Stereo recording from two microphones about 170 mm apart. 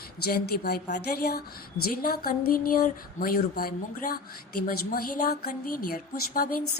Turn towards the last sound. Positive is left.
turn(degrees=60)  # may be behind; listen again after turning